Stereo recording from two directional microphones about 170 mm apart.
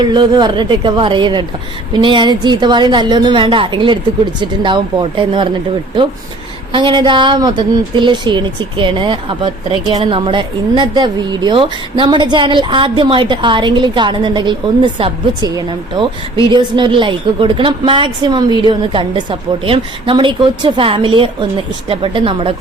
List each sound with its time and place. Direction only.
0.0 s a woman's voice: 25° right (ahead or behind)
6.7 s a woman's voice: 30° right (ahead or behind)